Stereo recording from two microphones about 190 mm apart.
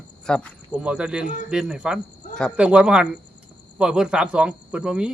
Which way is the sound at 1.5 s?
5° right (ahead or behind).